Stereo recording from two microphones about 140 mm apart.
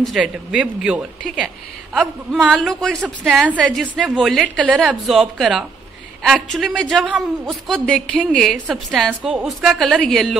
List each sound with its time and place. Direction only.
0.0 s speech: centre (ahead or behind)
7.1 s speech: 10° right (ahead or behind)
7.6 s speech: 5° left (ahead or behind)